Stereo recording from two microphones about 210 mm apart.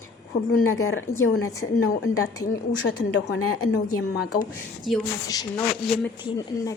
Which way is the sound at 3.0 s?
90° left.